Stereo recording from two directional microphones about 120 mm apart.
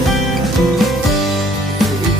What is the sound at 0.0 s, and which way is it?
Music, centre (ahead or behind).